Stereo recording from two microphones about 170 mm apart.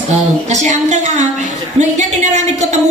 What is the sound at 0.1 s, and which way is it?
A woman's voice, 45° right (ahead or behind).